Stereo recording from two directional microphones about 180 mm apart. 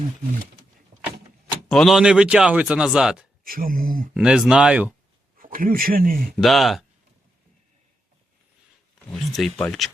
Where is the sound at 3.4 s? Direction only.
55° right (ahead or behind).